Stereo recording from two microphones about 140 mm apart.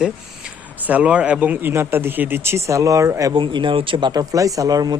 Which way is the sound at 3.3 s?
35° right (ahead or behind).